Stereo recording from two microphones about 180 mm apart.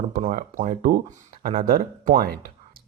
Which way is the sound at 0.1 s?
50° right (ahead or behind).